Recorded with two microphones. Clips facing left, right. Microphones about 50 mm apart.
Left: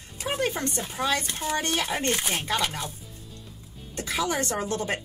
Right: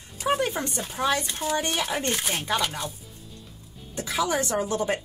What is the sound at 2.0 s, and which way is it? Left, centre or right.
Speech, centre.